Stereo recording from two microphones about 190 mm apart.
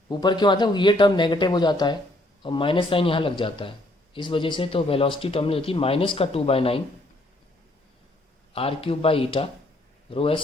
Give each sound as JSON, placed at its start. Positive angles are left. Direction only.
{"t": 0.1, "sound": "speech", "side_deg": 25}
{"t": 8.5, "sound": "speech", "side_deg": 30}